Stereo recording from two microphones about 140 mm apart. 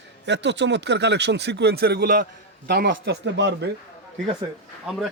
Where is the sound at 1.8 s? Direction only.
90° right.